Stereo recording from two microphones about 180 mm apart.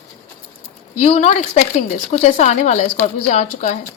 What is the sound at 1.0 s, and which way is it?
Speech, 40° left (ahead or behind).